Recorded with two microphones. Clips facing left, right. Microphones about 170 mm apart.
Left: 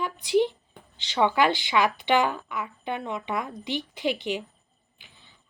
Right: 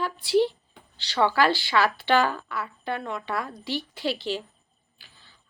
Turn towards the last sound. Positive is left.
turn(degrees=20)  # may be behind; listen again after turning